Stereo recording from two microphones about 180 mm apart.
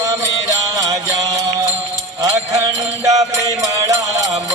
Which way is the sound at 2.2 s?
15° right (ahead or behind).